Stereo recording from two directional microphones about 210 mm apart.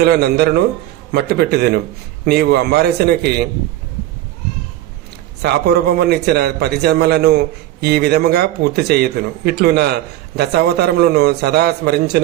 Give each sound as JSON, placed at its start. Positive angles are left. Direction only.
{"t": 0.0, "sound": "a man's voice", "side_deg": -50}
{"t": 5.4, "sound": "a man's voice", "side_deg": -50}